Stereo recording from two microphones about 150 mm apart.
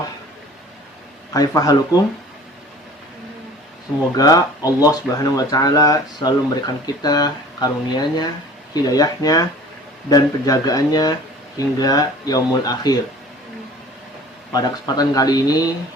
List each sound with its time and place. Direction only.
1.3 s speech: 25° left (ahead or behind)
4.2 s speech: 25° left (ahead or behind)
14.5 s speech: 25° left (ahead or behind)